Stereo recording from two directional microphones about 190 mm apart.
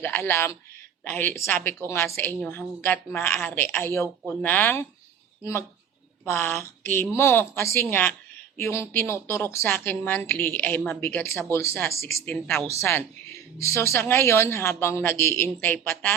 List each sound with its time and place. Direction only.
0.0 s a woman's voice: 10° left (ahead or behind)